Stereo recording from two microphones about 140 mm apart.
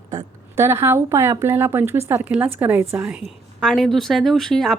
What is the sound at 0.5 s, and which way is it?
Speech, 20° right (ahead or behind).